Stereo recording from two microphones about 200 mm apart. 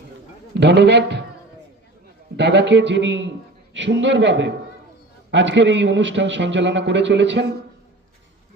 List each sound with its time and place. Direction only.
0.5 s a man's voice: 60° right (ahead or behind)
2.3 s a man's voice: 60° right (ahead or behind)